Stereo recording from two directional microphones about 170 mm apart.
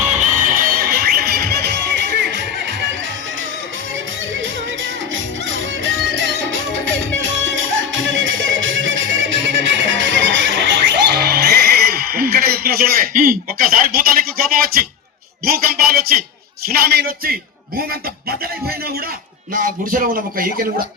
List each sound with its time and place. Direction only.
0.0 s music: 45° right (ahead or behind); by 2.7 s 90° right
4.4 s music: 90° right
11.2 s music: 70° right (ahead or behind)
15.4 s a sound: 60° right (ahead or behind)
16.6 s a man's voice: 65° right (ahead or behind)
19.5 s speech: 55° right (ahead or behind)